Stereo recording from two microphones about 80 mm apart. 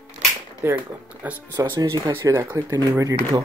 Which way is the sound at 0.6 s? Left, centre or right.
Right.